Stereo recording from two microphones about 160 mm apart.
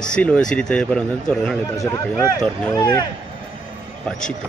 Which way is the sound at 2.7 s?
20° left (ahead or behind).